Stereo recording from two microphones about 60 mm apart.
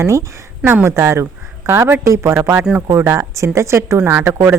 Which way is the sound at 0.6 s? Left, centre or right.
Right.